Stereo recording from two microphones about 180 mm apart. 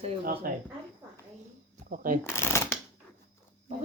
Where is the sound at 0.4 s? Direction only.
50° right (ahead or behind).